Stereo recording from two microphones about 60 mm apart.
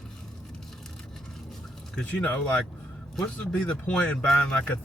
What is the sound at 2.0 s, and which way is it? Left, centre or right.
Speech, left.